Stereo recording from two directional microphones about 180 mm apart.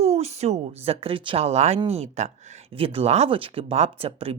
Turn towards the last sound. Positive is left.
turn(degrees=-35)  # may be behind; listen again after turning